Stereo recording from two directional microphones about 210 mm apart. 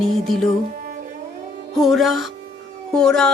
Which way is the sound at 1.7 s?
Centre (ahead or behind).